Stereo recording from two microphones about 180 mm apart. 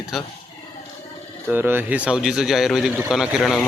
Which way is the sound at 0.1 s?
Centre (ahead or behind).